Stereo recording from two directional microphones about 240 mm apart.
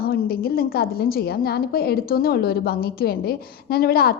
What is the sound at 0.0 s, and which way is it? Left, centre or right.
A woman's voice, left.